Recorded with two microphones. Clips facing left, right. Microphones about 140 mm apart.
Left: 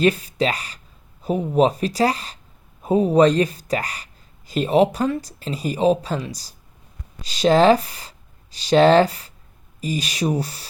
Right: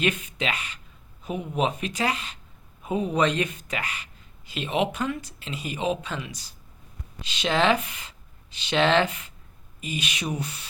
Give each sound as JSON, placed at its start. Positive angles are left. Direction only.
{"t": 0.0, "sound": "speech", "side_deg": 35}